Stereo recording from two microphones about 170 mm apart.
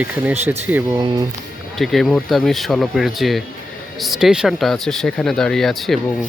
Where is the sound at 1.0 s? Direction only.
25° right (ahead or behind).